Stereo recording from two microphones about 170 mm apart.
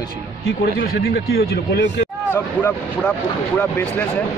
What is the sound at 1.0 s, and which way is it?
Speech, 65° left (ahead or behind).